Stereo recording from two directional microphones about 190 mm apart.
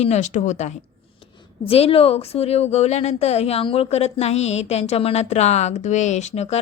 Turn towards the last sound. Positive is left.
turn(degrees=35)  # may be behind; listen again after turning